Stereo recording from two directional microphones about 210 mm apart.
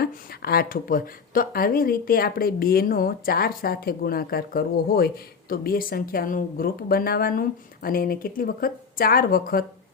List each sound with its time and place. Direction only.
0.0 s speech: 45° left (ahead or behind)